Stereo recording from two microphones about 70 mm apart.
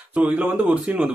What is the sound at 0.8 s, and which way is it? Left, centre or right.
Speech, centre.